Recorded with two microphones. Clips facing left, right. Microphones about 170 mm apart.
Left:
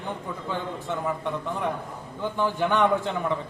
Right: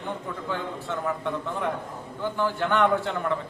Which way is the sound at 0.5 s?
15° left (ahead or behind).